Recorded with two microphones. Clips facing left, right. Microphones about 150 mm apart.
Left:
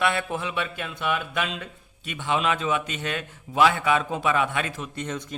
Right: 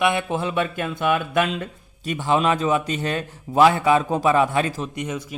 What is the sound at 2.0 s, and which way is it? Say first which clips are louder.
Speech: right 5 dB; 40° right (ahead or behind).